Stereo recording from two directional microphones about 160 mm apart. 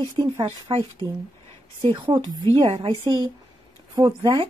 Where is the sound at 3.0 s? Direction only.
25° right (ahead or behind).